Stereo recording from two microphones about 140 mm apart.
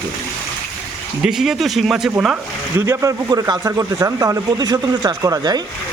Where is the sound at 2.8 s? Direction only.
20° right (ahead or behind).